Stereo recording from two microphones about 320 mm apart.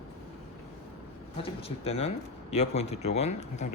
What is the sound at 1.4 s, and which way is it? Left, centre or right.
Speech, centre.